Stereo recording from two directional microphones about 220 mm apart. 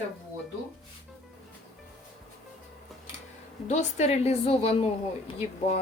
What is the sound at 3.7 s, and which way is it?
Speech, 30° left (ahead or behind).